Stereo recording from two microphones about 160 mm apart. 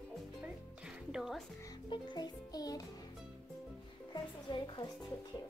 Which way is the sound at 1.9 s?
25° left (ahead or behind).